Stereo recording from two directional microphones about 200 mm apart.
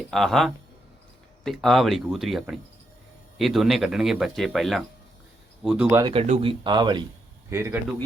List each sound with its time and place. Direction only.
0.1 s speech: centre (ahead or behind)
6.0 s speech: 20° right (ahead or behind)
7.5 s speech: 10° right (ahead or behind)